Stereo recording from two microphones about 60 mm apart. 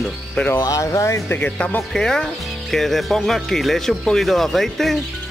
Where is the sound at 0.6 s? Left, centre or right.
Left.